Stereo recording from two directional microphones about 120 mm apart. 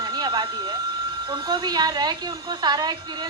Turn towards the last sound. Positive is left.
turn(degrees=-40)  # may be behind; listen again after turning